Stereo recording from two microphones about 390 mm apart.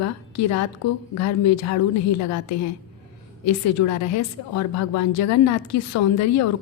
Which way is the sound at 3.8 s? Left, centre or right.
Left.